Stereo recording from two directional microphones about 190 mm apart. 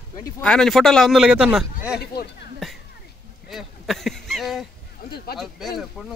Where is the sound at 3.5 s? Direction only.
Centre (ahead or behind).